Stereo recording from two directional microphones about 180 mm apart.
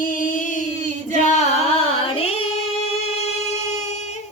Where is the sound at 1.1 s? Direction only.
40° left (ahead or behind).